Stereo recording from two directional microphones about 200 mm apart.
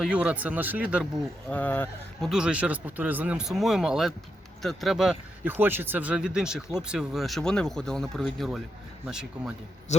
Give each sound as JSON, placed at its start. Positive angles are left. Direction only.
{"t": 0.0, "sound": "speech", "side_deg": -5}
{"t": 1.5, "sound": "speech", "side_deg": 10}
{"t": 2.3, "sound": "speech", "side_deg": -5}
{"t": 9.9, "sound": "a man's voice", "side_deg": 35}